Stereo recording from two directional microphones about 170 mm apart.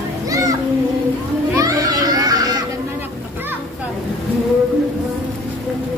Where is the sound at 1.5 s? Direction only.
20° right (ahead or behind).